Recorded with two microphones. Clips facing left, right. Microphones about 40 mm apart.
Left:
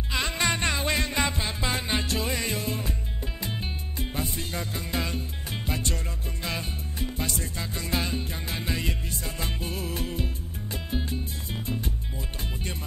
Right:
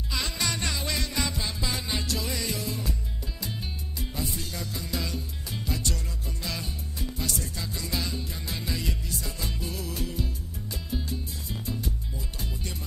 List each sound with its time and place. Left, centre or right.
0.1 s music: left
4.0 s music: left